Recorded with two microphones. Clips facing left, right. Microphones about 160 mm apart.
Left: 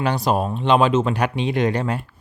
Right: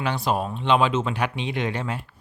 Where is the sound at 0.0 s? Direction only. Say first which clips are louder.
Left 4 dB; 40° left (ahead or behind).